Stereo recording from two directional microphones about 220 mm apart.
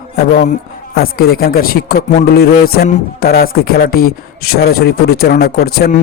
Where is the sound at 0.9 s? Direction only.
45° left (ahead or behind).